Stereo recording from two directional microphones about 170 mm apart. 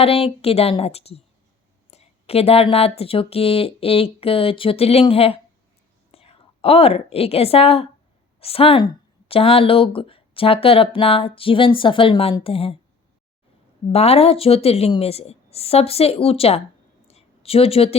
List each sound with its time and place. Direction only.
0.0 s speech: 35° left (ahead or behind)
13.9 s speech: 35° left (ahead or behind)
17.1 s a sound: 35° left (ahead or behind)